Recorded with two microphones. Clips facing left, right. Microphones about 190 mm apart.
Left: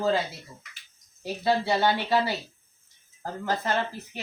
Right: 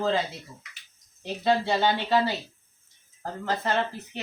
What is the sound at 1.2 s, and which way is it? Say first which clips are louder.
Speech: right 1 dB; 10° left (ahead or behind).